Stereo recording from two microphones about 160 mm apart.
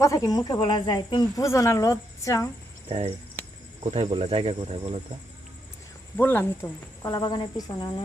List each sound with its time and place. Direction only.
0.0 s speech: 20° left (ahead or behind)
3.4 s cricket: 10° left (ahead or behind)
3.8 s speech: 40° right (ahead or behind)
6.1 s speech: 15° left (ahead or behind)